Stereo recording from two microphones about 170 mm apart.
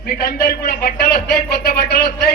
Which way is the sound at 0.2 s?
65° left (ahead or behind).